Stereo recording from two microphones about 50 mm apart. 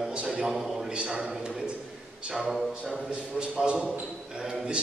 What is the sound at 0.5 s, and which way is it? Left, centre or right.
Speech, centre.